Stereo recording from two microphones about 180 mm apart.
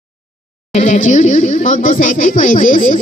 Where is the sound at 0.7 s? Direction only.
45° left (ahead or behind).